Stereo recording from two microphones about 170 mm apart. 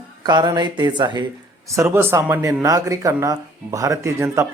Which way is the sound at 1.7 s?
15° right (ahead or behind).